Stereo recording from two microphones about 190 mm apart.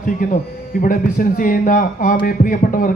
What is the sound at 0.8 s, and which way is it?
A man's voice, 45° left (ahead or behind).